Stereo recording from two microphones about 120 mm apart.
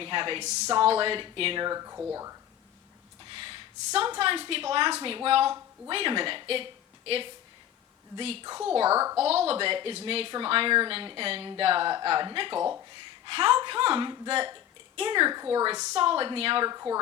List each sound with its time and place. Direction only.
0.0 s speech: 45° right (ahead or behind)
0.4 s speech: 70° right (ahead or behind)
0.7 s speech: 50° right (ahead or behind)
1.6 s speech: 30° right (ahead or behind)
3.2 s a woman's voice: 50° right (ahead or behind)
8.1 s speech: 55° right (ahead or behind)
8.9 s speech: 20° right (ahead or behind)
9.2 s a woman's voice: 60° right (ahead or behind); by 16.0 s 35° right (ahead or behind)
16.0 s speech: 50° right (ahead or behind)
16.6 s speech: 30° right (ahead or behind)